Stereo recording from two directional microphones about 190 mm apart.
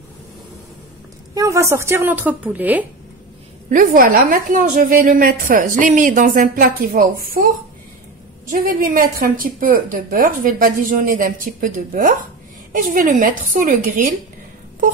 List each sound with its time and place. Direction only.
1.3 s a woman's voice: 15° right (ahead or behind)
3.7 s a woman's voice: 45° right (ahead or behind)